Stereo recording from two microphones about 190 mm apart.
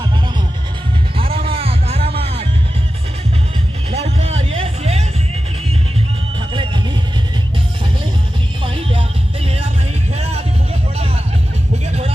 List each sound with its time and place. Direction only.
1.1 s music: 30° right (ahead or behind)
3.9 s music: 35° right (ahead or behind)
6.5 s music: 25° right (ahead or behind)
8.6 s music: 25° right (ahead or behind)